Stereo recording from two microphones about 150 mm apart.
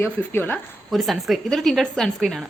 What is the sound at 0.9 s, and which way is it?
A woman's voice, centre (ahead or behind).